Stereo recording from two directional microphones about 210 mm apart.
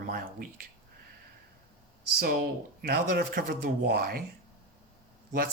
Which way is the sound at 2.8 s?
45° right (ahead or behind).